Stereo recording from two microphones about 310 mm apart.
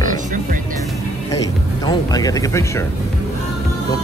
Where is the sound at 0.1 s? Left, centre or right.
Right.